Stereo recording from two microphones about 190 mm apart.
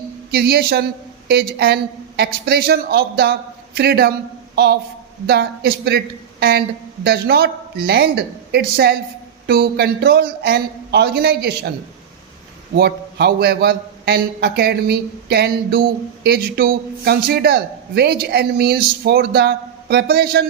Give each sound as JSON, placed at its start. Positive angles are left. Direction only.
{"t": 0.3, "sound": "a man's voice", "side_deg": -55}
{"t": 12.7, "sound": "a man's voice", "side_deg": -60}